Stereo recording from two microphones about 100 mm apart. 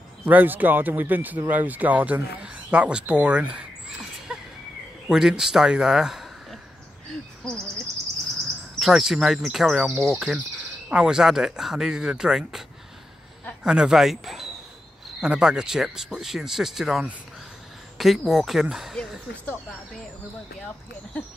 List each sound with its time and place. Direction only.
0.2 s speech: 20° right (ahead or behind)
4.3 s a sound: 5° right (ahead or behind)
5.0 s speech: 5° right (ahead or behind)
8.7 s speech: 5° right (ahead or behind)
13.7 s speech: 5° right (ahead or behind)